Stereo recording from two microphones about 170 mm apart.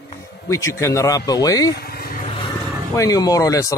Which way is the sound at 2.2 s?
30° left (ahead or behind).